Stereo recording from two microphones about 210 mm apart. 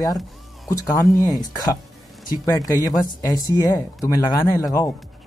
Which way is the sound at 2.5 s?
15° left (ahead or behind).